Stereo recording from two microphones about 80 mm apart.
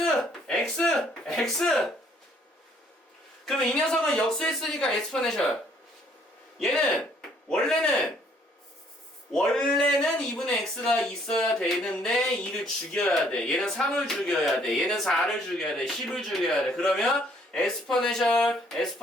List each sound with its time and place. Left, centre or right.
0.0 s a sound: centre
0.7 s speech: centre
3.4 s speech: centre
6.6 s speech: centre
9.3 s speech: centre